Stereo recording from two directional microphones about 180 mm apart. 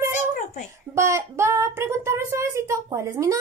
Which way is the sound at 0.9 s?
15° right (ahead or behind).